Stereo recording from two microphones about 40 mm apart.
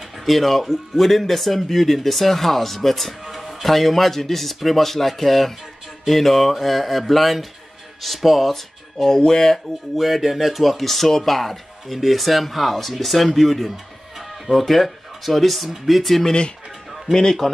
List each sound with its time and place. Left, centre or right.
0.2 s speech: centre
9.1 s speech: centre
9.9 s speech: centre